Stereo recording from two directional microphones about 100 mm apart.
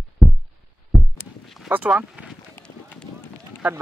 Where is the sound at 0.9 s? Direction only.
Centre (ahead or behind).